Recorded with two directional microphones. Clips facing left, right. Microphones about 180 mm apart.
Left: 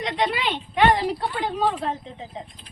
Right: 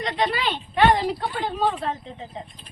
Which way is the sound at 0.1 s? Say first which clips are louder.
Even; centre (ahead or behind).